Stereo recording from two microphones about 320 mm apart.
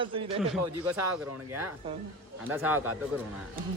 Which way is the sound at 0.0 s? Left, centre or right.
Centre.